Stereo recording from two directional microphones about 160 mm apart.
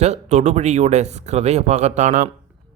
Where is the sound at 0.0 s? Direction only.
45° right (ahead or behind).